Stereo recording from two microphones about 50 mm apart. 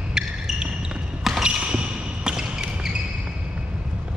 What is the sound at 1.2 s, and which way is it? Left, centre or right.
Basketball bounce, centre.